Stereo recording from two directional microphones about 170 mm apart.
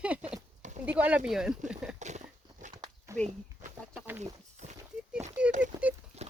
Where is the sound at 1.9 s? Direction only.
45° right (ahead or behind).